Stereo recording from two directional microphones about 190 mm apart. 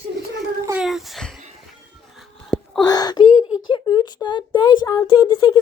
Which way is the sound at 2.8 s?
20° left (ahead or behind).